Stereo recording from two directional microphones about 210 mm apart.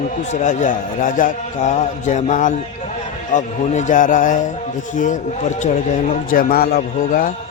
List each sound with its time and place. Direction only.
0.3 s a man's voice: 35° left (ahead or behind)
6.3 s a man's voice: 45° left (ahead or behind)